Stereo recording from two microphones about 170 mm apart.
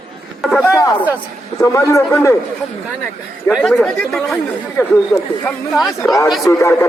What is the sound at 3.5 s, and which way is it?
Speech, centre (ahead or behind).